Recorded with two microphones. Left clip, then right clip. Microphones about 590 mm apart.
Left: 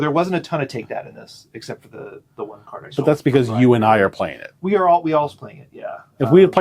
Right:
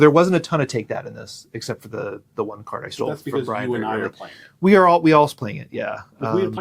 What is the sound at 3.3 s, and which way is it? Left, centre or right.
Speech, left.